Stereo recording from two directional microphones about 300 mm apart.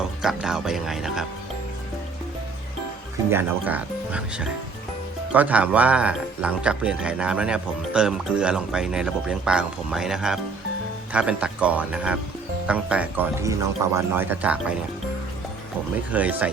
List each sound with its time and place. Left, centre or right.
0.2 s speech: centre
3.2 s speech: centre
16.1 s speech: centre